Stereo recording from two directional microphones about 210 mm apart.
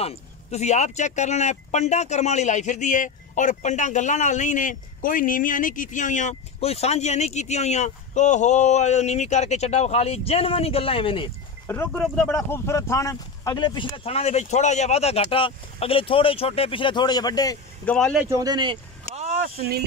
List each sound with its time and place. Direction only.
0.0 s speech: 30° left (ahead or behind)
11.6 s speech: 10° left (ahead or behind)
17.8 s speech: 5° left (ahead or behind)
18.2 s speech: 15° right (ahead or behind); by 19.8 s 45° right (ahead or behind)